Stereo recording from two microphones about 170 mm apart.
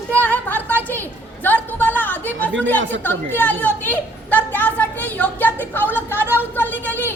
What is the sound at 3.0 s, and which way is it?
A woman's voice, 10° left (ahead or behind).